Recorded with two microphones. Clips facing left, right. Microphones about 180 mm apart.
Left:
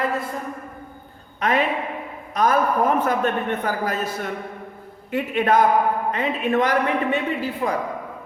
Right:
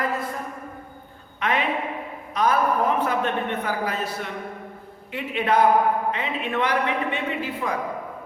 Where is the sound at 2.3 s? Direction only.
45° left (ahead or behind).